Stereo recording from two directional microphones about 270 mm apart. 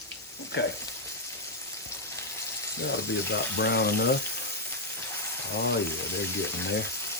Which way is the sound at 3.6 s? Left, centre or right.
Left.